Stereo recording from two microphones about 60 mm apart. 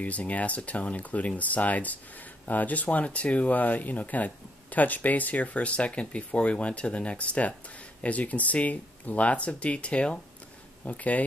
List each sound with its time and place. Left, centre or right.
0.0 s speech: left